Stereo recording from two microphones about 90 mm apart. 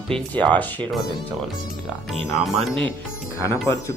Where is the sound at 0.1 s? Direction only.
15° left (ahead or behind).